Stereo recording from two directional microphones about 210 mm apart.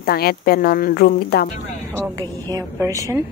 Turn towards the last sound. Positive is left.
turn(degrees=-15)  # may be behind; listen again after turning